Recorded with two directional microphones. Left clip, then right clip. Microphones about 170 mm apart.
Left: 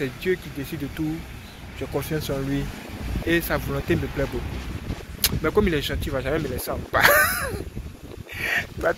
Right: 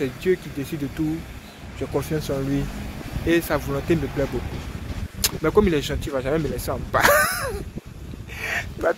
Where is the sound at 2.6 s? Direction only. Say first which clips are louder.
Right 1 dB; 80° right.